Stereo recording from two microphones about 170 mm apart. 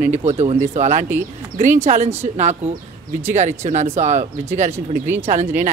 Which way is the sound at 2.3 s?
40° right (ahead or behind).